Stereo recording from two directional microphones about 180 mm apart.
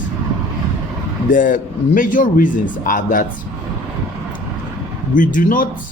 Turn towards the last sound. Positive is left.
turn(degrees=50)  # may be behind; listen again after turning